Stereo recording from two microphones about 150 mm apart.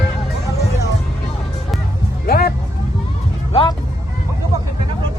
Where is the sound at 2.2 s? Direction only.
90° left.